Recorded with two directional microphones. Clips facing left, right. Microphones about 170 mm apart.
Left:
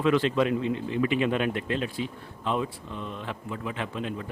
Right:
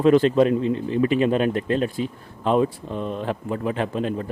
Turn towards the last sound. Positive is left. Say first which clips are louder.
# right 8 dB
turn(degrees=-40)  # may be behind; listen again after turning